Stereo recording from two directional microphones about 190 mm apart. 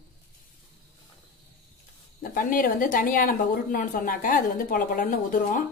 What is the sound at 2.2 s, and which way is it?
A woman's voice, 50° left (ahead or behind).